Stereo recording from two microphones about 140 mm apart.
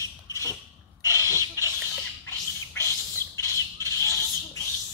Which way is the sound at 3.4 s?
20° left (ahead or behind).